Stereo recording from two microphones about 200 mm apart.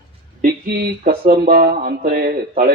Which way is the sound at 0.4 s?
50° right (ahead or behind).